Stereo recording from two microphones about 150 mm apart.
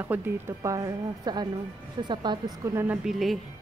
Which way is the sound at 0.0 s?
15° right (ahead or behind).